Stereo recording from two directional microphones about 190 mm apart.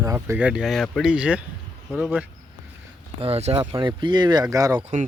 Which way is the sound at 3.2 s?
35° right (ahead or behind).